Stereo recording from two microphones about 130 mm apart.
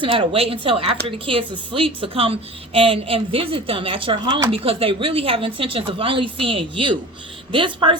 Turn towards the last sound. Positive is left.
turn(degrees=-40)  # may be behind; listen again after turning